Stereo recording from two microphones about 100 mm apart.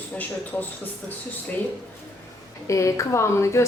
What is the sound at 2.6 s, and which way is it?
A woman's voice, 30° left (ahead or behind).